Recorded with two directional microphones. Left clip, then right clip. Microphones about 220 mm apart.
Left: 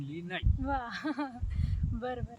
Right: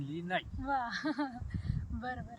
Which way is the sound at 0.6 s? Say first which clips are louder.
Even; 15° left (ahead or behind).